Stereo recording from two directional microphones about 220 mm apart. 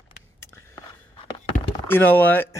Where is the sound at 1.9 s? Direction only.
10° left (ahead or behind).